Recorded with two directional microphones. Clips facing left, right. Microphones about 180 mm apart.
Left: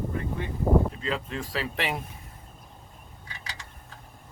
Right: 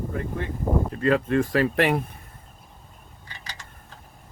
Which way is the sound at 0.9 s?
60° right (ahead or behind).